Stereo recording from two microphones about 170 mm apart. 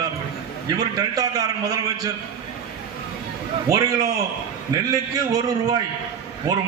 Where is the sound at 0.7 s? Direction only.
20° right (ahead or behind).